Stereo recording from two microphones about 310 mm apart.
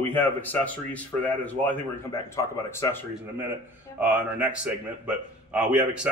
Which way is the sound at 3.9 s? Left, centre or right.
Centre.